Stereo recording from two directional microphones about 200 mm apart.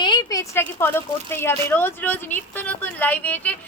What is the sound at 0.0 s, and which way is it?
Speech, 20° left (ahead or behind).